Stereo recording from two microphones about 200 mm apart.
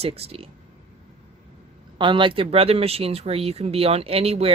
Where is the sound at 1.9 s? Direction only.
25° right (ahead or behind).